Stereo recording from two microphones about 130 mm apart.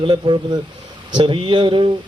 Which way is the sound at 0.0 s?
40° right (ahead or behind).